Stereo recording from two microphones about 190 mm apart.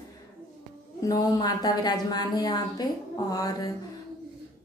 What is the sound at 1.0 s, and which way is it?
Speech, 20° left (ahead or behind).